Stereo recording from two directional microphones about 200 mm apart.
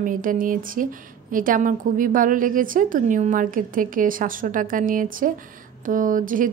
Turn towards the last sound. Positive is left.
turn(degrees=-40)  # may be behind; listen again after turning